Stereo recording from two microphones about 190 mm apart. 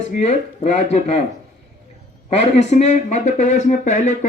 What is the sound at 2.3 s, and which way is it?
Speech, 35° left (ahead or behind).